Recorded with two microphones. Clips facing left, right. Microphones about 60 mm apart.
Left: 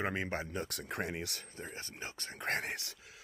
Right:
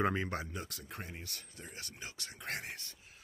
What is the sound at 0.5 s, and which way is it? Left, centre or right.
Speech, left.